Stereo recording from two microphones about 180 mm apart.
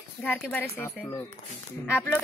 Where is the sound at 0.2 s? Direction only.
10° left (ahead or behind).